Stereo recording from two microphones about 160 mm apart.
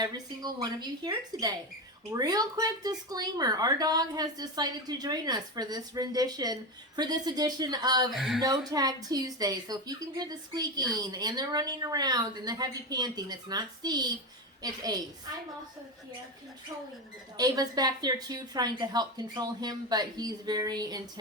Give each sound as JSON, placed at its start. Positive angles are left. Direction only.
{"t": 0.0, "sound": "speech", "side_deg": -25}
{"t": 8.1, "sound": "speech", "side_deg": 0}
{"t": 8.4, "sound": "speech", "side_deg": -25}
{"t": 17.3, "sound": "speech", "side_deg": -25}